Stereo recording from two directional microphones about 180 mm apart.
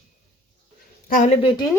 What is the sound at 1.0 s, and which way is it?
Speech, 50° left (ahead or behind).